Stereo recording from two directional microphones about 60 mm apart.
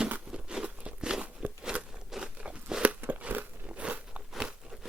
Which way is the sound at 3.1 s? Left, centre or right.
Right.